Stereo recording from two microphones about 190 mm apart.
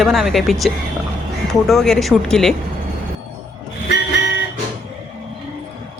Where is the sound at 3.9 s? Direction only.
65° left (ahead or behind).